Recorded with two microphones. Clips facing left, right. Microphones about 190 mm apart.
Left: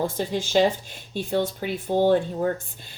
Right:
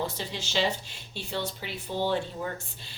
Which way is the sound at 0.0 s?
50° left (ahead or behind).